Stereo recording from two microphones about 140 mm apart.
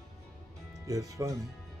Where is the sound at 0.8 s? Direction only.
25° right (ahead or behind).